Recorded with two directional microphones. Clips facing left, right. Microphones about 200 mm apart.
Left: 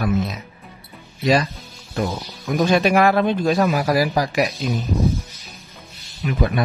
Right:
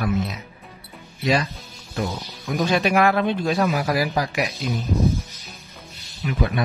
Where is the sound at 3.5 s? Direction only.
50° left (ahead or behind).